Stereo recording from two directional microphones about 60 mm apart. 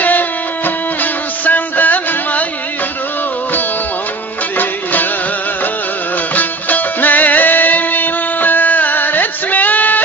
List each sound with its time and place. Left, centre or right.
0.0 s music: left
6.3 s music: left